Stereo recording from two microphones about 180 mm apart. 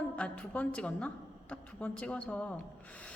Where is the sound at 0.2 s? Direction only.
5° left (ahead or behind).